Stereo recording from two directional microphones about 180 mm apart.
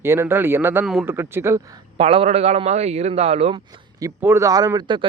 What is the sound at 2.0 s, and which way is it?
A man's voice, 30° right (ahead or behind).